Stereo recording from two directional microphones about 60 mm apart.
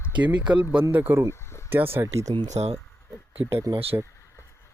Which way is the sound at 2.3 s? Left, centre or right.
Right.